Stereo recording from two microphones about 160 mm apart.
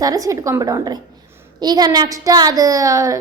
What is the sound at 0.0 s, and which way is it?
A woman's voice, 20° right (ahead or behind).